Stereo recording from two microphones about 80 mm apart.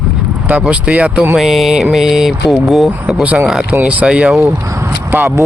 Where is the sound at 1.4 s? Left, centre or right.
Centre.